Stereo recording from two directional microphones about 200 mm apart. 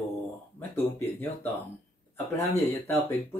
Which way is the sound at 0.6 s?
10° left (ahead or behind).